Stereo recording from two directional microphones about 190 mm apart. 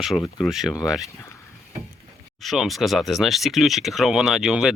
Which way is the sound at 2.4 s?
Centre (ahead or behind).